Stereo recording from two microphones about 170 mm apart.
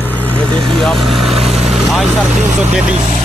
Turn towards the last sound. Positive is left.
turn(degrees=-5)  # may be behind; listen again after turning